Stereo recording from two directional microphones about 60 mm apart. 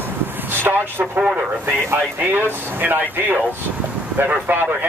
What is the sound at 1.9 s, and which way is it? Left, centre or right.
Speech, right.